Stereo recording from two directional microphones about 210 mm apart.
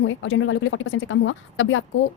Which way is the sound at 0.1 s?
65° left (ahead or behind).